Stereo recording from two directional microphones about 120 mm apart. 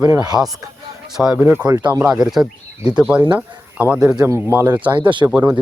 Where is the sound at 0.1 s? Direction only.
35° right (ahead or behind).